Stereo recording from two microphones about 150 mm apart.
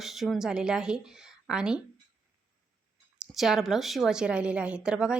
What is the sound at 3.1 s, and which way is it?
A woman's voice, centre (ahead or behind).